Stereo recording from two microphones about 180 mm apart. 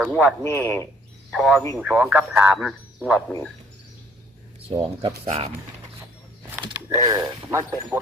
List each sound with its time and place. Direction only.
0.4 s speech: 10° left (ahead or behind)
1.3 s a man's voice: centre (ahead or behind)
4.7 s mechanisms: 30° right (ahead or behind)
6.7 s mechanisms: 20° right (ahead or behind)